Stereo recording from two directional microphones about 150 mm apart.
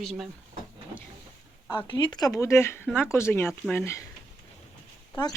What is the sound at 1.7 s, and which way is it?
Speech, 30° left (ahead or behind).